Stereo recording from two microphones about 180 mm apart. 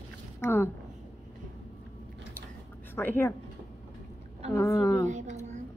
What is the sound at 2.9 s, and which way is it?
Speech, 10° left (ahead or behind).